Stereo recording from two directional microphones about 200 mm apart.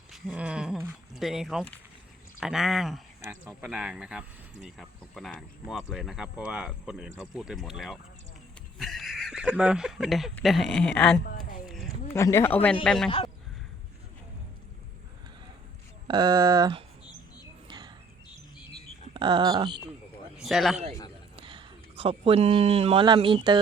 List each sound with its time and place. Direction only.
0.1 s speech: 5° right (ahead or behind)
8.8 s speech: centre (ahead or behind)
11.6 s a sound: centre (ahead or behind)
12.0 s speech: 15° left (ahead or behind)
12.8 s speech: 5° left (ahead or behind)
13.1 s speech: 25° left (ahead or behind)
16.0 s speech: 20° right (ahead or behind)
17.7 s a sound: 20° right (ahead or behind)
19.1 s speech: 25° right (ahead or behind)
20.4 s speech: centre (ahead or behind)
21.3 s speech: 25° right (ahead or behind)